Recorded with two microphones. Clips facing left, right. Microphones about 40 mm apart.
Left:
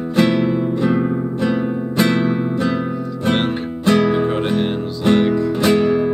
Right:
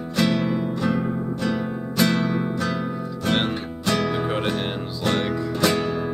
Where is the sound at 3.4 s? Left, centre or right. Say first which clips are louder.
Left 5 dB; centre.